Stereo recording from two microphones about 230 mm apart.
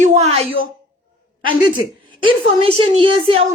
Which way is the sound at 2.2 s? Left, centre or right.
Right.